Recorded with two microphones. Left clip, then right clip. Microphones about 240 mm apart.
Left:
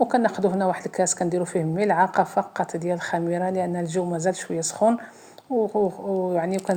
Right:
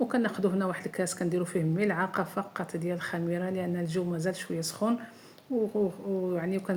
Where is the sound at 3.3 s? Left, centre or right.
Left.